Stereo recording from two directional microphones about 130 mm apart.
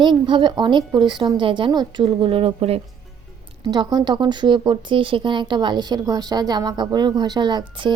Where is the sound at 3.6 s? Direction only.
35° right (ahead or behind).